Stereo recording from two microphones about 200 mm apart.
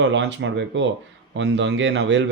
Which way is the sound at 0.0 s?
65° right (ahead or behind).